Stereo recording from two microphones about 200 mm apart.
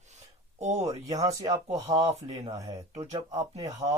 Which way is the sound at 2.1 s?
30° right (ahead or behind).